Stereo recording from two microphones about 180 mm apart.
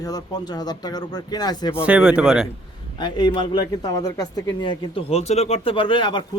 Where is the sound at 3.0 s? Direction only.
25° left (ahead or behind).